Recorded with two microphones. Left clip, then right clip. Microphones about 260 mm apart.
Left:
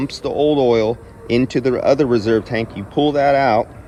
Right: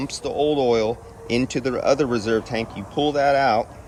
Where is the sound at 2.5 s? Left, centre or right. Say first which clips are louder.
Left 5 dB; centre.